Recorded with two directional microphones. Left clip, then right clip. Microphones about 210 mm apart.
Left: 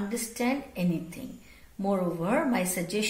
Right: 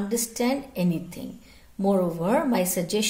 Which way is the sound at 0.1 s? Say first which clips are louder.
Right 5 dB; 45° right (ahead or behind).